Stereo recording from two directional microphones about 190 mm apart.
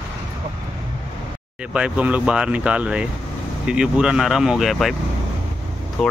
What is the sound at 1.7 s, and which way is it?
Speech, 5° right (ahead or behind).